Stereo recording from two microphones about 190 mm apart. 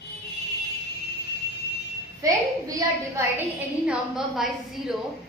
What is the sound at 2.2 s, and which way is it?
A woman's voice, 15° right (ahead or behind).